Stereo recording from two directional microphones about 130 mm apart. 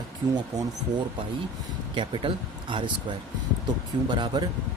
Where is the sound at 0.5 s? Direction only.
30° right (ahead or behind).